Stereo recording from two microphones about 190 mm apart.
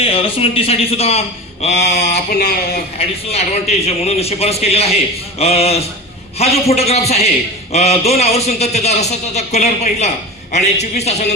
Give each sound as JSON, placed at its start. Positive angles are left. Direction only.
{"t": 0.0, "sound": "a man's voice", "side_deg": 30}
{"t": 2.0, "sound": "speech", "side_deg": 55}
{"t": 3.2, "sound": "a man's voice", "side_deg": 35}